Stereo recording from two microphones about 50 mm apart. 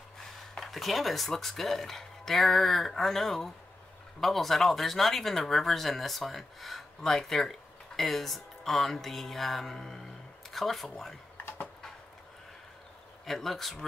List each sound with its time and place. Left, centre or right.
0.6 s speech: centre
11.3 s a sound: left
13.2 s speech: centre